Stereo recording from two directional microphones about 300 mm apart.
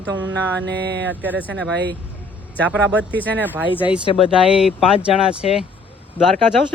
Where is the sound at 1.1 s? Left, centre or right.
Centre.